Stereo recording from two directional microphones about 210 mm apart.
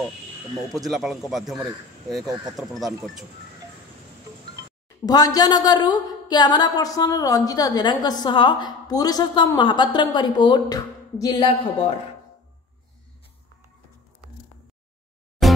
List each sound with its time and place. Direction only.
0.8 s a man's voice: centre (ahead or behind)
5.0 s a woman's voice: 20° left (ahead or behind)
15.4 s music: centre (ahead or behind)